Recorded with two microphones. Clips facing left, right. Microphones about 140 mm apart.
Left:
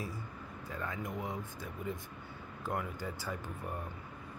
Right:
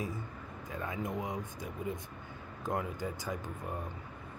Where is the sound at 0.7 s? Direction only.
15° right (ahead or behind).